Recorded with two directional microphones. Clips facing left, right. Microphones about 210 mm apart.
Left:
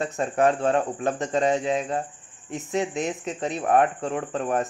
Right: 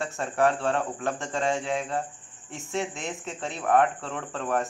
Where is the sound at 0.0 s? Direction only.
20° left (ahead or behind).